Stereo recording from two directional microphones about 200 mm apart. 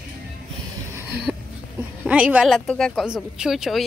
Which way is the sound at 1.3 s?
5° left (ahead or behind).